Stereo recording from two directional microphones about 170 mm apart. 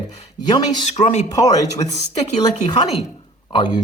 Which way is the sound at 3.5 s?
25° left (ahead or behind).